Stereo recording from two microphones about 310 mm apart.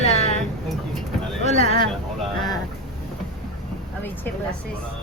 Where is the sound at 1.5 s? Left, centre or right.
Centre.